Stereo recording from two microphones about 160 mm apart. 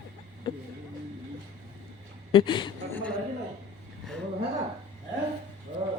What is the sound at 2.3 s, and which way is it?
Speech, 35° left (ahead or behind).